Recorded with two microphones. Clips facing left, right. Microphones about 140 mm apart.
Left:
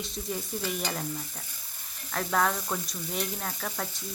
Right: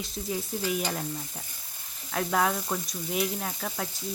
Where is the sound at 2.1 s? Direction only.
5° right (ahead or behind).